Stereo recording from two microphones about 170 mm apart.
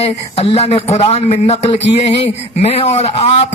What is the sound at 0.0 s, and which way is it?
A man's voice, 35° left (ahead or behind).